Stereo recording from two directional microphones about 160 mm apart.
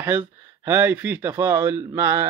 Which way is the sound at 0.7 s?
10° right (ahead or behind).